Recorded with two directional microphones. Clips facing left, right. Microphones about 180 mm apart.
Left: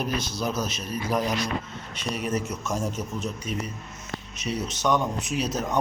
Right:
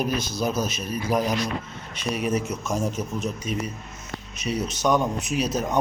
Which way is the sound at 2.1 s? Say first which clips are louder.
Right 3 dB; 10° right (ahead or behind).